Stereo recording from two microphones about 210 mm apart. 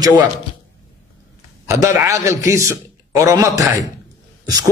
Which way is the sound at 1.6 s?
15° right (ahead or behind).